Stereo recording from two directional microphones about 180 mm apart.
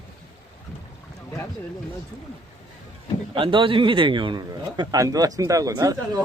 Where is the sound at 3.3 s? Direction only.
25° right (ahead or behind).